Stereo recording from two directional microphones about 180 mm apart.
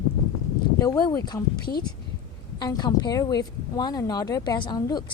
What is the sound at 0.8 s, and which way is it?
Speech, 20° left (ahead or behind).